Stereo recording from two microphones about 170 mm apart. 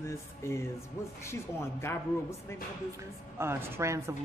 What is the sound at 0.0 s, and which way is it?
Music, 15° left (ahead or behind).